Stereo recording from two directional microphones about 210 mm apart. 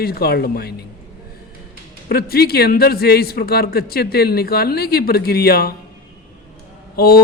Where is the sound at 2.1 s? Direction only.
50° left (ahead or behind).